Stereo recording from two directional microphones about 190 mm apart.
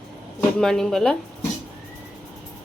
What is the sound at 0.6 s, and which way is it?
Speech, centre (ahead or behind).